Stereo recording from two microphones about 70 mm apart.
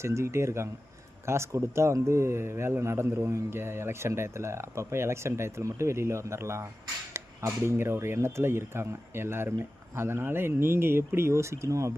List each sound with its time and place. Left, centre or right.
0.0 s speech: right